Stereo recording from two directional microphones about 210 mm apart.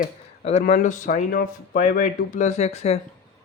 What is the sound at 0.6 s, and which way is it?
Speech, 40° left (ahead or behind).